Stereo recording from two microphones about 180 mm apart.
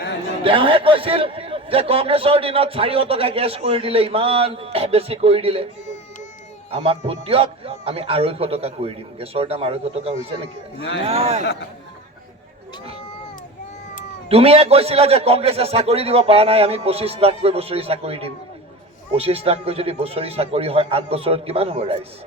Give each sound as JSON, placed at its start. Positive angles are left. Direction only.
{"t": 0.4, "sound": "a man's voice", "side_deg": -30}
{"t": 6.7, "sound": "a man's voice", "side_deg": -35}
{"t": 14.3, "sound": "a man's voice", "side_deg": -35}